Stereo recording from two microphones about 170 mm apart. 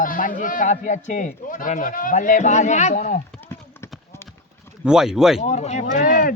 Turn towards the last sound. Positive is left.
turn(degrees=55)  # may be behind; listen again after turning